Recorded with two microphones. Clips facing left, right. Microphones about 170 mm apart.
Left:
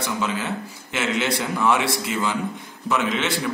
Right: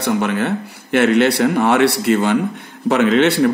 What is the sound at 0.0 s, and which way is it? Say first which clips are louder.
Speech: right 8 dB; 60° right (ahead or behind).